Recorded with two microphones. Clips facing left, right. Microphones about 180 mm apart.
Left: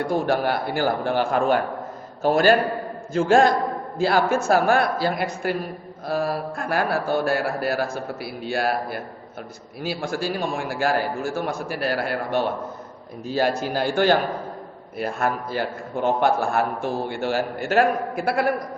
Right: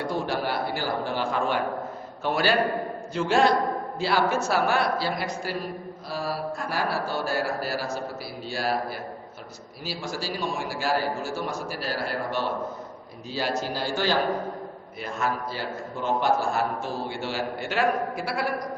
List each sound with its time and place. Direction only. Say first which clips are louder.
0.0 s a man's voice: left 6 dB; 50° left (ahead or behind)